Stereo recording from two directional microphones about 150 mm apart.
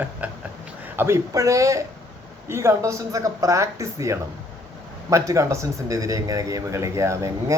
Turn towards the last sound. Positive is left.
turn(degrees=-20)  # may be behind; listen again after turning